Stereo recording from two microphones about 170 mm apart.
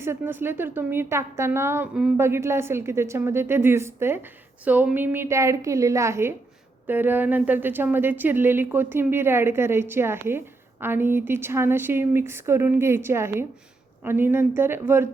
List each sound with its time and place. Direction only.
0.0 s speech: 15° right (ahead or behind)